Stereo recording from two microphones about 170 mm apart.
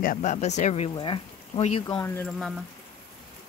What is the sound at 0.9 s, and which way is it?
Speech, 30° left (ahead or behind).